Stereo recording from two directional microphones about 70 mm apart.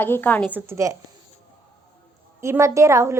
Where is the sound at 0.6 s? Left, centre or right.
Right.